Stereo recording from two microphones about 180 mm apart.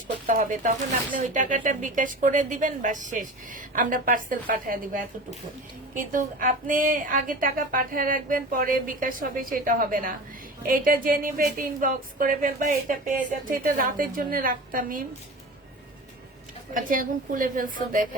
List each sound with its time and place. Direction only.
0.3 s speech: 45° right (ahead or behind)
16.7 s speech: 50° right (ahead or behind)